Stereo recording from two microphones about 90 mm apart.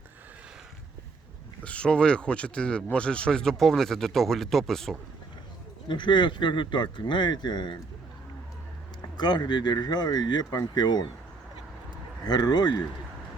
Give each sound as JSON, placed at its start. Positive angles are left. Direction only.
{"t": 1.6, "sound": "speech", "side_deg": 10}
{"t": 5.9, "sound": "speech", "side_deg": 60}
{"t": 9.1, "sound": "speech", "side_deg": 55}
{"t": 12.2, "sound": "speech", "side_deg": 50}